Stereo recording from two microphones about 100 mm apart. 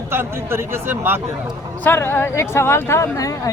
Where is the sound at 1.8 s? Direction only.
25° left (ahead or behind).